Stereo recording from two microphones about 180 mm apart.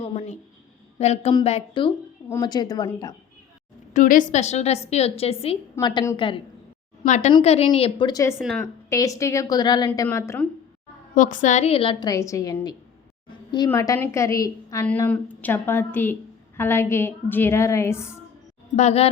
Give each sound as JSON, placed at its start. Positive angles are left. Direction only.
{"t": 0.0, "sound": "a woman's voice", "side_deg": 30}
{"t": 1.3, "sound": "a woman's voice", "side_deg": 25}
{"t": 3.9, "sound": "a woman's voice", "side_deg": 45}
{"t": 7.0, "sound": "a woman's voice", "side_deg": 40}
{"t": 8.4, "sound": "a woman's voice", "side_deg": 0}
{"t": 8.9, "sound": "a woman's voice", "side_deg": 20}
{"t": 11.1, "sound": "a woman's voice", "side_deg": 45}
{"t": 18.8, "sound": "a woman's voice", "side_deg": 40}